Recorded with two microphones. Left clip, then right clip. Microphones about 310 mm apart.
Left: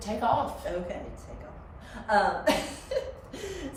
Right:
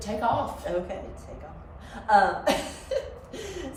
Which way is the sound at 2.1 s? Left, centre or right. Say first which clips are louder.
Right 3 dB; centre.